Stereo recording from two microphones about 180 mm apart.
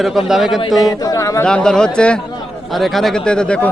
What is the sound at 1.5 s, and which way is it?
A man's voice, 5° left (ahead or behind).